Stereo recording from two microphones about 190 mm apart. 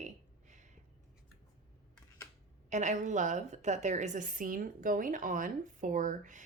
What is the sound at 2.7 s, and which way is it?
A woman's voice, 40° right (ahead or behind).